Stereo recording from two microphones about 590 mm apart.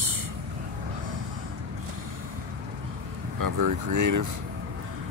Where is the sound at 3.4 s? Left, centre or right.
Right.